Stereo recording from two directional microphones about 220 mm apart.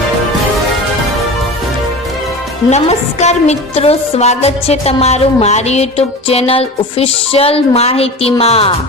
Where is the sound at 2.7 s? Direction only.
30° left (ahead or behind).